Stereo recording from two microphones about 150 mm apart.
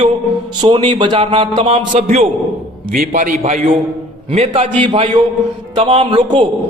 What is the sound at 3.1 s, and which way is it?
Speech, 60° right (ahead or behind).